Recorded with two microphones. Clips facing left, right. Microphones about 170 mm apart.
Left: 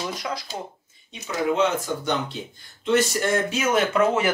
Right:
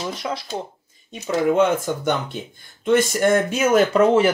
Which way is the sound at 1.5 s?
50° right (ahead or behind).